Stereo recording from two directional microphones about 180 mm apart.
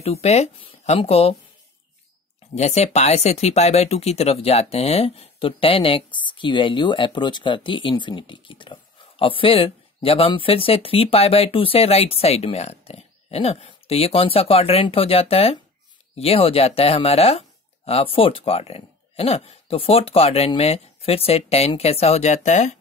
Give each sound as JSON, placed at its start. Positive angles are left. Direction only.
{"t": 0.0, "sound": "speech", "side_deg": 35}
{"t": 2.5, "sound": "speech", "side_deg": 40}